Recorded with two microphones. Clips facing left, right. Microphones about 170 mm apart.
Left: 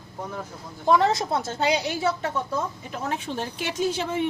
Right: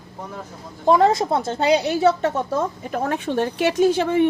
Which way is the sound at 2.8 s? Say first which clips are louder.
Right 6 dB; 55° right (ahead or behind).